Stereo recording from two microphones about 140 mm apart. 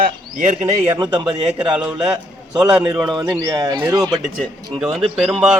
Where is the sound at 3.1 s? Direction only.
30° right (ahead or behind).